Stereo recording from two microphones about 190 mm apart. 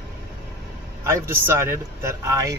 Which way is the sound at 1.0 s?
15° right (ahead or behind).